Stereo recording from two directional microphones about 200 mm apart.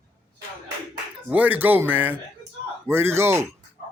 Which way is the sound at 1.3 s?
10° right (ahead or behind).